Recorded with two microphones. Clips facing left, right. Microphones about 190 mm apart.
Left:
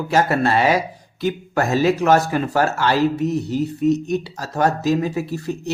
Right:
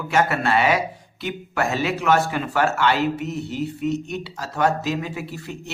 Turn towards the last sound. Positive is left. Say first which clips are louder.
# left 8 dB
turn(degrees=40)  # may be behind; listen again after turning